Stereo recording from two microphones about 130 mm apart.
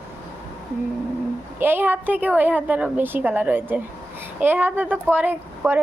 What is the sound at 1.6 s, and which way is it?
A woman's voice, 15° right (ahead or behind).